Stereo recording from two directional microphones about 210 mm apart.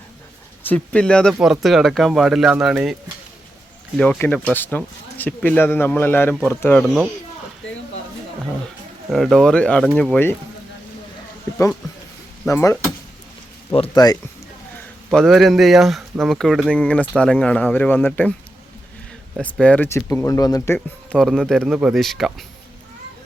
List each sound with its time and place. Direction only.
0.6 s speech: 5° left (ahead or behind)
3.9 s speech: centre (ahead or behind)
9.1 s speech: centre (ahead or behind)
11.5 s speech: 10° left (ahead or behind)
15.1 s speech: centre (ahead or behind)
19.4 s speech: 5° left (ahead or behind)